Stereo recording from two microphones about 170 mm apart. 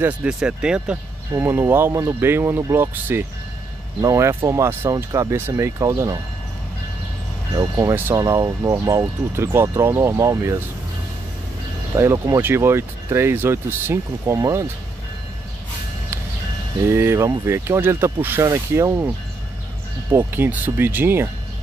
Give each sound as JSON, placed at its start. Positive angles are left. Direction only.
{"t": 0.0, "sound": "speech", "side_deg": -5}
{"t": 7.5, "sound": "speech", "side_deg": -20}
{"t": 11.9, "sound": "speech", "side_deg": -15}
{"t": 16.8, "sound": "speech", "side_deg": -15}